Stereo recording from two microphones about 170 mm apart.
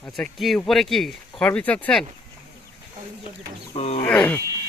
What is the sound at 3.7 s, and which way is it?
Speech, 35° left (ahead or behind).